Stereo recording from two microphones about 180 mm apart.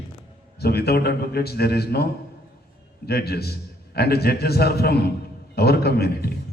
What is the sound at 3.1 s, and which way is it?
A man's voice, 60° left (ahead or behind).